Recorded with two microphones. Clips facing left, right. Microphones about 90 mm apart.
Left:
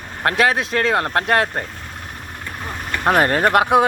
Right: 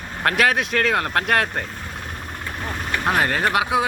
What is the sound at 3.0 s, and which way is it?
Speech, 50° left (ahead or behind).